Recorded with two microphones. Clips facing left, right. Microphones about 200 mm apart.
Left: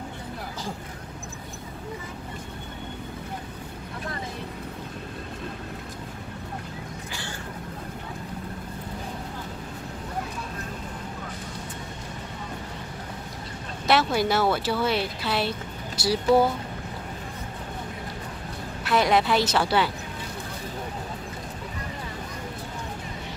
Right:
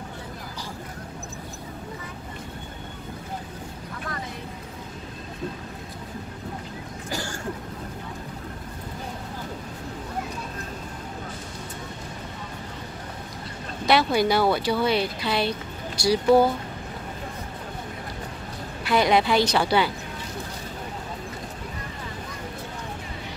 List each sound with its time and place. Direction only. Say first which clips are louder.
7.1 s vehicle: right 5 dB; 40° right (ahead or behind)
13.8 s speech: right 2 dB; centre (ahead or behind)
18.9 s speech: right 1 dB; centre (ahead or behind)